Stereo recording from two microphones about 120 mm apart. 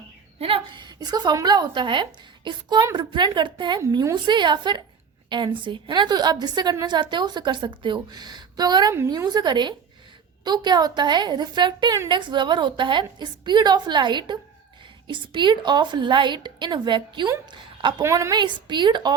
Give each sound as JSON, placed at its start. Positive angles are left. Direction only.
{"t": 0.3, "sound": "a woman's voice", "side_deg": -50}
{"t": 3.8, "sound": "a woman's voice", "side_deg": -25}
{"t": 4.1, "sound": "a woman's voice", "side_deg": -40}
{"t": 18.0, "sound": "a woman's voice", "side_deg": -25}
{"t": 18.3, "sound": "a woman's voice", "side_deg": -40}